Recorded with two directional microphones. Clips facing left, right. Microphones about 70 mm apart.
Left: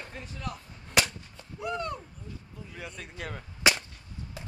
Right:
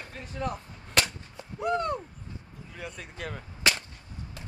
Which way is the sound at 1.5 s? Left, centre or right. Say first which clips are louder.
Right 5 dB; right.